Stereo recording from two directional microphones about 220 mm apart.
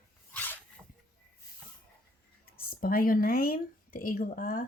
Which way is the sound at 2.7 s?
40° left (ahead or behind).